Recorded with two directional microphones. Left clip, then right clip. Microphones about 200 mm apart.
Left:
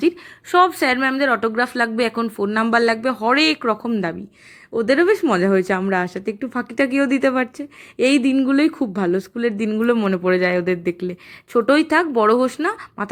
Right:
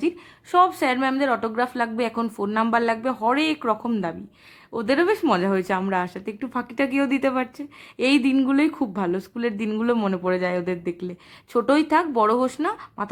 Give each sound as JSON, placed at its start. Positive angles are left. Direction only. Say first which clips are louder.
{"t": 0.5, "sound": "speech", "louder": "left 3 dB", "side_deg": 15}